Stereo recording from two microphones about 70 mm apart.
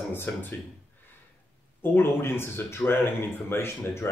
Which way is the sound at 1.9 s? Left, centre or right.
Left.